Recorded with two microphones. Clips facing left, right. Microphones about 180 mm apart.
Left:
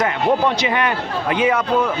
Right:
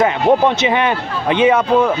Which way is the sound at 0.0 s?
25° right (ahead or behind).